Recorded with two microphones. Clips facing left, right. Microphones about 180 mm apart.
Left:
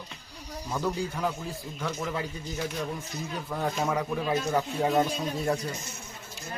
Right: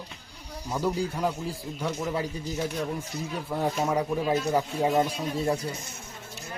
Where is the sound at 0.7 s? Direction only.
10° right (ahead or behind).